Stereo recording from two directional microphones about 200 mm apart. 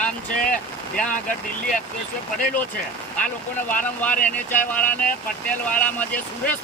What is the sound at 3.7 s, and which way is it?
Speech, 5° left (ahead or behind).